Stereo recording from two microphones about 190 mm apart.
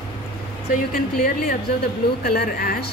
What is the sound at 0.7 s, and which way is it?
A woman's voice, 50° left (ahead or behind).